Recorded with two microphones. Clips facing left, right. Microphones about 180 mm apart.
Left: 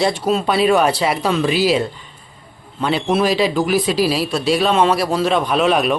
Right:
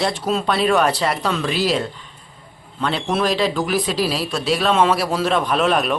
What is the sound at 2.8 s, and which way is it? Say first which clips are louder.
Speech: left 3 dB; 5° left (ahead or behind).